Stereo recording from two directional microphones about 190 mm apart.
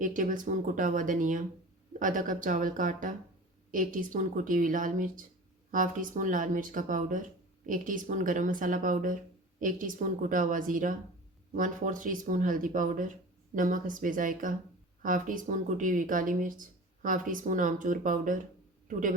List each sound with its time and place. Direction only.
0.0 s a man's voice: 45° right (ahead or behind)